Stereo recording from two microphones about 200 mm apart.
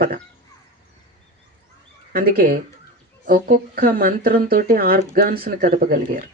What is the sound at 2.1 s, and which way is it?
Speech, 45° right (ahead or behind).